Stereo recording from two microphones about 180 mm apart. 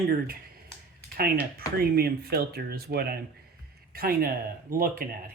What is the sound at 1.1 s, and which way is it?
Speech, 55° right (ahead or behind).